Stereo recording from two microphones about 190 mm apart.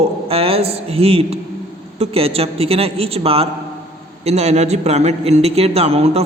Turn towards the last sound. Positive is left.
turn(degrees=-35)  # may be behind; listen again after turning